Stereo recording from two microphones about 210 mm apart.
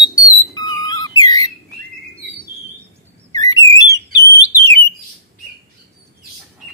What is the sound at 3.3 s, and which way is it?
Whistle, 20° left (ahead or behind).